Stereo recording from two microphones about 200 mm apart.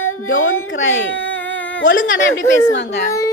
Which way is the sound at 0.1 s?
90° left.